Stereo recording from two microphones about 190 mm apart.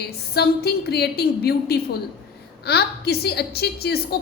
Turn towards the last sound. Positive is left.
turn(degrees=55)  # may be behind; listen again after turning